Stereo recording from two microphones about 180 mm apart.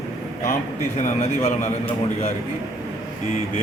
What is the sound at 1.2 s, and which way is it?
A man's voice, 35° left (ahead or behind).